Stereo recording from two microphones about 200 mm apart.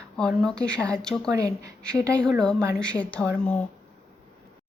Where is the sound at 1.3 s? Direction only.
15° right (ahead or behind).